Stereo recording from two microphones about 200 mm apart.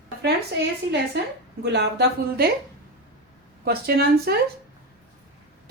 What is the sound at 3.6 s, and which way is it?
Speech, 50° right (ahead or behind).